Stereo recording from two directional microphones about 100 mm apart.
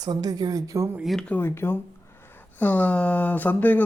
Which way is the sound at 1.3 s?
25° left (ahead or behind).